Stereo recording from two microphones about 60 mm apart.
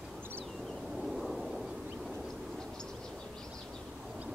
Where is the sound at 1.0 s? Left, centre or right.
Centre.